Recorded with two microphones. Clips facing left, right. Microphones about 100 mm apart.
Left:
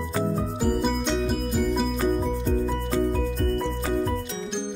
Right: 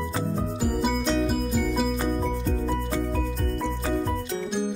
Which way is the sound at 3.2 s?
Centre (ahead or behind).